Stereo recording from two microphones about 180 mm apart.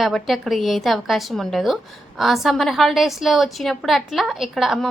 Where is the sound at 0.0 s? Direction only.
Centre (ahead or behind).